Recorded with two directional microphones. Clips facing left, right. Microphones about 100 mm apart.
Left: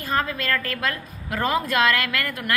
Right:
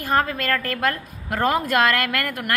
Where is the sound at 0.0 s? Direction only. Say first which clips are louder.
Right 3 dB; 55° right (ahead or behind).